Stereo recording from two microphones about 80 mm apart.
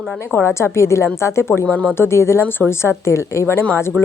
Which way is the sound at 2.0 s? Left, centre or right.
Left.